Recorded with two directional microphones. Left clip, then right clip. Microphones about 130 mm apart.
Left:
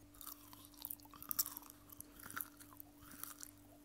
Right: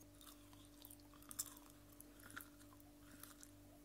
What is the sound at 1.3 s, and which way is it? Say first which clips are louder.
Chewing: left 8 dB; 25° left (ahead or behind).